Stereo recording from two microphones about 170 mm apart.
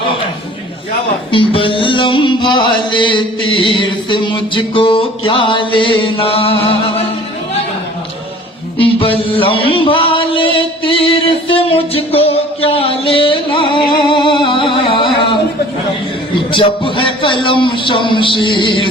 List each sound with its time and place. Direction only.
1.3 s a man's voice: 30° left (ahead or behind)
3.8 s music: 30° left (ahead or behind)
8.8 s music: 30° left (ahead or behind)
16.3 s a man's voice: 30° left (ahead or behind)